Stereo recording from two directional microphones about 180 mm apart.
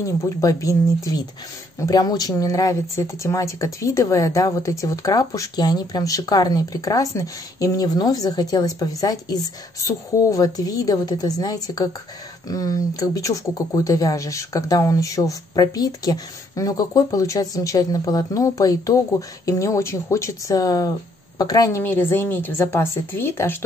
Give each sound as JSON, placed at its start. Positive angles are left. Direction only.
{"t": 0.0, "sound": "a woman's voice", "side_deg": 20}